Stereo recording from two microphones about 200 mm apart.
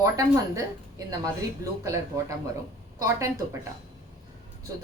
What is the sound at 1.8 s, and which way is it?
Speech, 15° right (ahead or behind).